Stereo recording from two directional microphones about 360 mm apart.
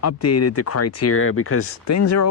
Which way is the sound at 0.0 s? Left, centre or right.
Left.